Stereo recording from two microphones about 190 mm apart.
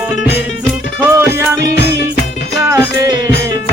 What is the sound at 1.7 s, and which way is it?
Music, 60° left (ahead or behind).